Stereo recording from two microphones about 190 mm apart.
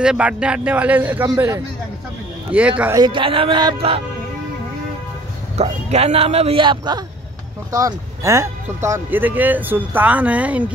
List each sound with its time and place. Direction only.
0.0 s speech: 5° right (ahead or behind)
2.8 s speech: 20° right (ahead or behind)
5.6 s speech: 35° right (ahead or behind); by 10.7 s 5° right (ahead or behind)